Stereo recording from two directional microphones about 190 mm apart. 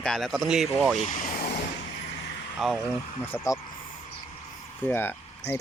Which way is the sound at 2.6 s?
Centre (ahead or behind).